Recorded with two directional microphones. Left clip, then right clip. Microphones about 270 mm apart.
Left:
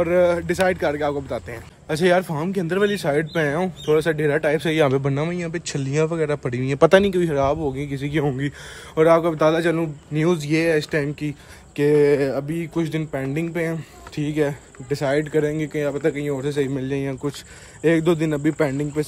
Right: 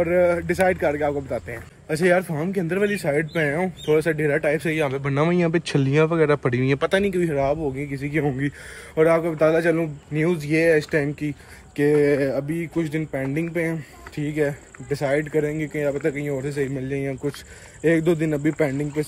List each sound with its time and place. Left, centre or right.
0.0 s speech: centre
4.7 s speech: left
5.0 s speech: centre